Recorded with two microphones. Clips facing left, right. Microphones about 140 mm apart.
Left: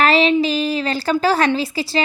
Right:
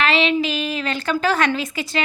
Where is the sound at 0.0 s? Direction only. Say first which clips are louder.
Left 4 dB; 40° left (ahead or behind).